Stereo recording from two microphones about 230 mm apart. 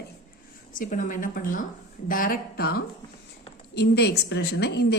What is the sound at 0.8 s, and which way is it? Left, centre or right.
A woman's voice, left.